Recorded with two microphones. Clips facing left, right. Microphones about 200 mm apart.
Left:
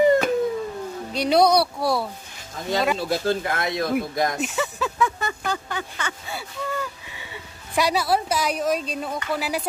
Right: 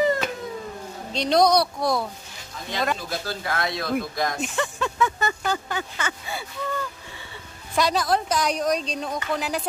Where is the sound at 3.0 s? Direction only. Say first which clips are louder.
Left 8 dB; 30° left (ahead or behind).